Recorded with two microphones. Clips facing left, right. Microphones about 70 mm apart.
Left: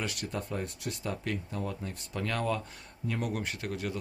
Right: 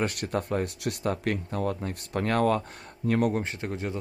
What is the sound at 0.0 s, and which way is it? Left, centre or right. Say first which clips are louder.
Speech: right 7 dB; right.